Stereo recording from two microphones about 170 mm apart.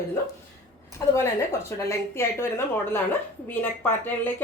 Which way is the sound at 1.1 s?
15° left (ahead or behind).